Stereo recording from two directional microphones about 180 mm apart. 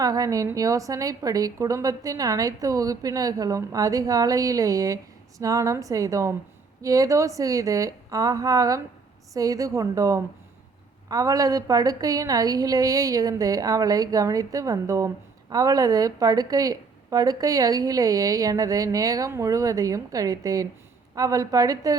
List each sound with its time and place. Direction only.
0.0 s a woman's voice: 20° right (ahead or behind)